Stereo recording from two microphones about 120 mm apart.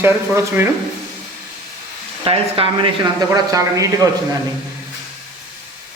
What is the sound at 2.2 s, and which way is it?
Speech, 50° right (ahead or behind).